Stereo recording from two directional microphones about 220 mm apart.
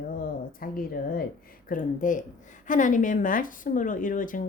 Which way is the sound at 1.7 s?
35° left (ahead or behind).